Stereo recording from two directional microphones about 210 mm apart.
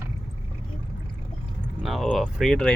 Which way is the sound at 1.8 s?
Centre (ahead or behind).